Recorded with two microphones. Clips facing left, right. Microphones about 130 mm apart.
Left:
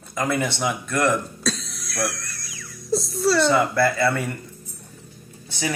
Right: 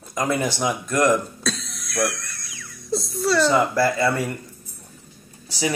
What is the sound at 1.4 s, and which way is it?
Music, centre (ahead or behind).